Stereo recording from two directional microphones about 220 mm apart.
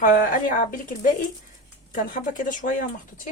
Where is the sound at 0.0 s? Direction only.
35° left (ahead or behind).